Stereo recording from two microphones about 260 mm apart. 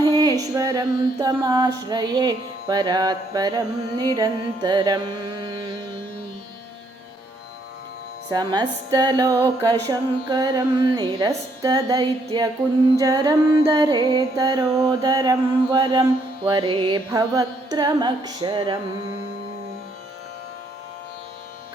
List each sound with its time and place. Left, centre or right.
0.0 s music: centre
8.3 s music: centre